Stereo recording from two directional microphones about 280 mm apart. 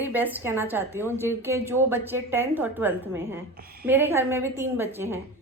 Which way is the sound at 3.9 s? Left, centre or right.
Centre.